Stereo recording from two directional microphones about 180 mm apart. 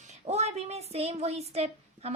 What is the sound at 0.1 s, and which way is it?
Speech, 35° right (ahead or behind).